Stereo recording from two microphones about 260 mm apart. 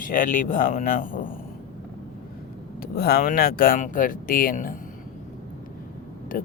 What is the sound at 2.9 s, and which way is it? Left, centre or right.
Speech, left.